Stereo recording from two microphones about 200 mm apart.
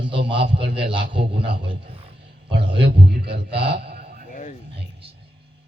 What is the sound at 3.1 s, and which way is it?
Music, 55° right (ahead or behind).